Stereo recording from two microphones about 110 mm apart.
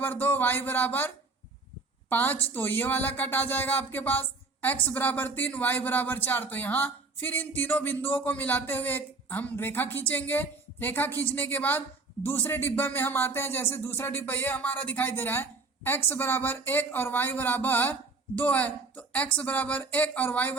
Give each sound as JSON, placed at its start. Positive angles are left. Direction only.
{"t": 0.0, "sound": "speech", "side_deg": 20}